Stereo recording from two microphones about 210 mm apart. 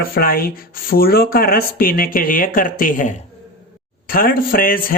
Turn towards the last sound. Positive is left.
turn(degrees=45)  # may be behind; listen again after turning